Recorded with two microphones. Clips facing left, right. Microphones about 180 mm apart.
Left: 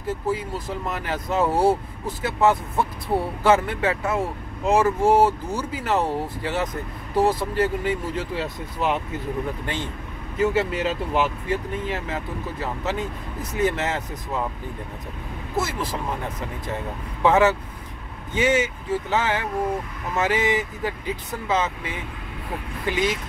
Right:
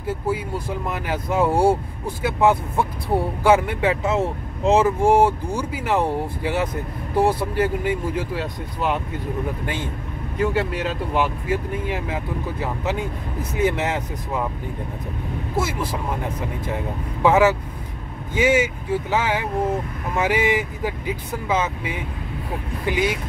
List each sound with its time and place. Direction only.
0.0 s speech: 10° right (ahead or behind)
8.4 s speech: centre (ahead or behind)
10.3 s speech: centre (ahead or behind); by 14.4 s 15° right (ahead or behind)
15.5 s speech: 10° right (ahead or behind)